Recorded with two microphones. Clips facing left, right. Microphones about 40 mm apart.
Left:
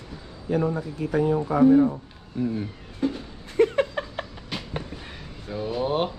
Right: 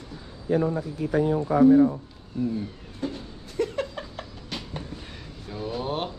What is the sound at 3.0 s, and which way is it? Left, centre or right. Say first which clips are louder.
Speech: left 5 dB; centre.